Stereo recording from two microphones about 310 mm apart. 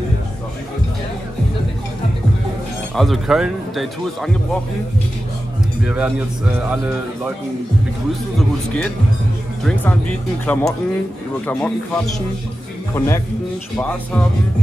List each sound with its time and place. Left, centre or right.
3.0 s speech: centre
5.9 s speech: centre
9.7 s speech: centre